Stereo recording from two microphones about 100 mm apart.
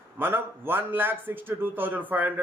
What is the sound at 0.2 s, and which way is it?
A man's voice, 20° right (ahead or behind).